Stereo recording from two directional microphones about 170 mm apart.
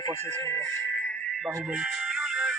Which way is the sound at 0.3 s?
15° left (ahead or behind).